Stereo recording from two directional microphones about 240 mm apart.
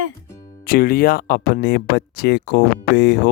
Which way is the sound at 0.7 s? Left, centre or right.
Left.